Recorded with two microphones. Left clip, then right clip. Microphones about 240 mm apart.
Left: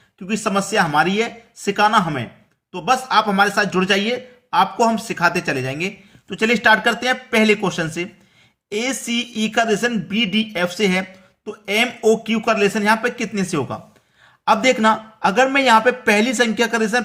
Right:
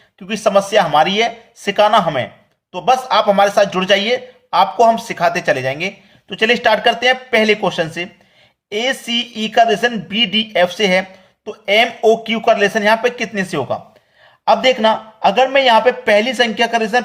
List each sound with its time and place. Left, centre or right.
0.3 s speech: centre